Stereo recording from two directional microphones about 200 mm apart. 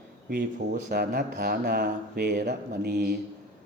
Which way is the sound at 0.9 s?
50° right (ahead or behind).